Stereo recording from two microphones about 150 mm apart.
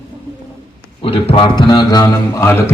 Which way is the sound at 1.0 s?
35° left (ahead or behind).